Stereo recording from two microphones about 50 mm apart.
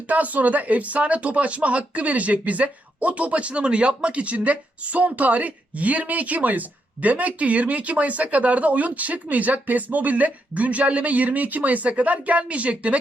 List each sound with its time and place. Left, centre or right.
0.1 s speech: right